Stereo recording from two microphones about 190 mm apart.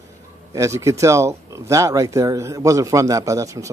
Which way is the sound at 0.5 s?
15° right (ahead or behind).